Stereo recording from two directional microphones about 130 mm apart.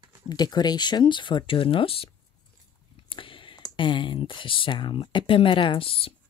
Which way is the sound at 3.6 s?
40° left (ahead or behind).